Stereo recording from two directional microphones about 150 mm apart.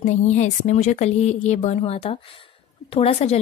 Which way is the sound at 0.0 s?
50° left (ahead or behind).